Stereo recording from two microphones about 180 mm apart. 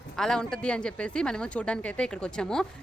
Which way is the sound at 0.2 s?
5° left (ahead or behind).